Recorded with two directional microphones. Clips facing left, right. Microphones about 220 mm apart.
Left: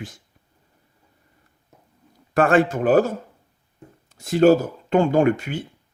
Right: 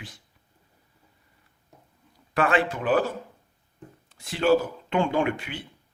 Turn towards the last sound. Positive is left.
turn(degrees=45)  # may be behind; listen again after turning